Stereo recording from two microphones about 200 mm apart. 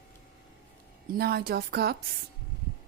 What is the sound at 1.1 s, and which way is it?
Speech, 50° right (ahead or behind).